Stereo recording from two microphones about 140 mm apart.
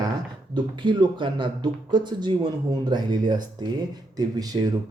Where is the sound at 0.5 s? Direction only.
35° right (ahead or behind).